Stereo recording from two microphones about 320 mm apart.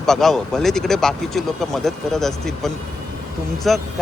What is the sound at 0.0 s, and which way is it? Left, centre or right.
Speech, centre.